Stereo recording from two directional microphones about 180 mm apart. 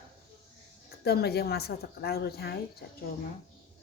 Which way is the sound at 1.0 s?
60° left (ahead or behind).